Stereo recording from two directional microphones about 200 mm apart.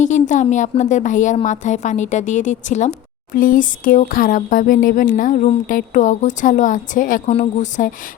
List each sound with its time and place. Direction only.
0.0 s a woman's voice: 40° left (ahead or behind)